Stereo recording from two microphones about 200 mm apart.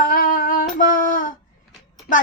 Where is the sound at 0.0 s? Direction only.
45° left (ahead or behind).